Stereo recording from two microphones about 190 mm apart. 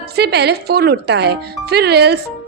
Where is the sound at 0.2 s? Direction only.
60° right (ahead or behind).